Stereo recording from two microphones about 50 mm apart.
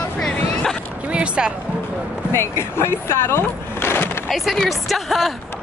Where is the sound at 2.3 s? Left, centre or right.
Left.